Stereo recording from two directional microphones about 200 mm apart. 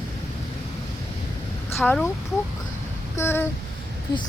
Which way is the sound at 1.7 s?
10° left (ahead or behind).